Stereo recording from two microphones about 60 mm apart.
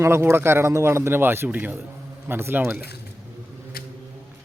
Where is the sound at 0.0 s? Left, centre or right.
Right.